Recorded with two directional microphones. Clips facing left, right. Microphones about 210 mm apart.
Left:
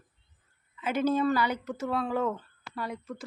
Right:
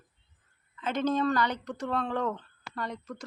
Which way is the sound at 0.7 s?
10° left (ahead or behind).